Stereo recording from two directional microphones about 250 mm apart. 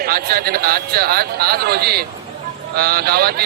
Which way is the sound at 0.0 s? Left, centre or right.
Right.